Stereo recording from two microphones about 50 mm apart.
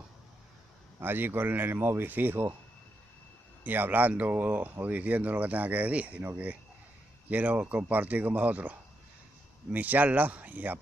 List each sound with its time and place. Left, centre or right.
1.0 s speech: right
3.6 s speech: right